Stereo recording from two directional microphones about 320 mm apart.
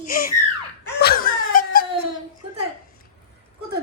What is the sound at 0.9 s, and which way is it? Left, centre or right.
Wail, left.